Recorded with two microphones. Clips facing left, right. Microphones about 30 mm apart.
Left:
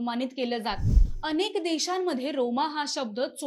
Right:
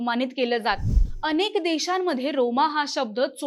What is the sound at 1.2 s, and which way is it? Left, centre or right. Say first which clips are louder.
A woman's voice: right 5 dB; centre.